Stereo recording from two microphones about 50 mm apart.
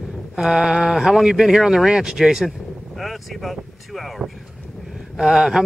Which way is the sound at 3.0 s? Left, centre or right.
Centre.